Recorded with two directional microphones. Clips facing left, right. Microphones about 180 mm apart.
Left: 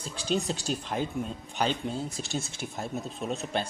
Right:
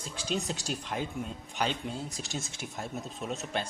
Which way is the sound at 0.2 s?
35° left (ahead or behind).